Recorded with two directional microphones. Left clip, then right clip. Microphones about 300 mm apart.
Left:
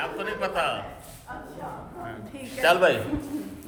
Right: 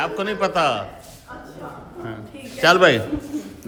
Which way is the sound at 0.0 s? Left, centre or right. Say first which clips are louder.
Right 7 dB; centre.